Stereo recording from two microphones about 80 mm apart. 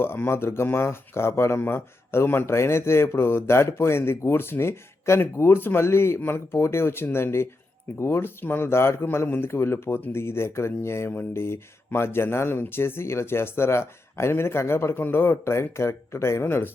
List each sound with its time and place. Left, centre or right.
0.0 s speech: left